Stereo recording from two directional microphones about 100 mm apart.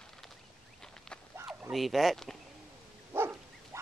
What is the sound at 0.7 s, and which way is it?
Duck, 5° left (ahead or behind).